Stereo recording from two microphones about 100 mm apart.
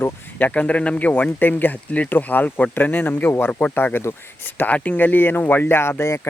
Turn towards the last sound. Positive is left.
turn(degrees=25)  # may be behind; listen again after turning